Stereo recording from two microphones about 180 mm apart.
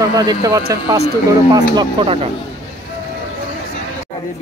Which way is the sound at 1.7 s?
25° right (ahead or behind).